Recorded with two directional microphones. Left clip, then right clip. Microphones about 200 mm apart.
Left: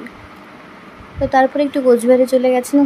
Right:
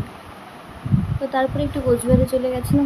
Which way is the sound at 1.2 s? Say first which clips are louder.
Left 8 dB; 30° left (ahead or behind).